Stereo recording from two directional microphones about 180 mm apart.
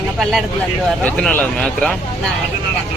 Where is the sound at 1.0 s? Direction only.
5° left (ahead or behind).